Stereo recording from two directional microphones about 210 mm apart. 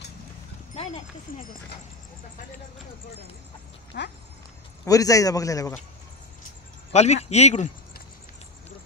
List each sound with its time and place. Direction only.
3.9 s speech: 55° left (ahead or behind)
4.8 s a man's voice: 15° left (ahead or behind)
6.9 s speech: 30° left (ahead or behind)